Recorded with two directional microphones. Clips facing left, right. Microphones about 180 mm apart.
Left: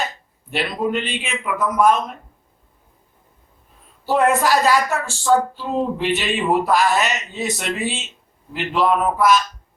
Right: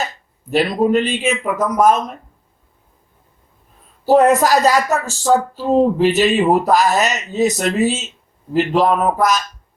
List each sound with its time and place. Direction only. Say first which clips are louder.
0.5 s speech: right 7 dB; 40° right (ahead or behind)
4.0 s speech: right 5 dB; 40° right (ahead or behind)